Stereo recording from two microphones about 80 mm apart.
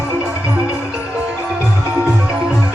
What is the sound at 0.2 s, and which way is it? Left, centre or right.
Music, right.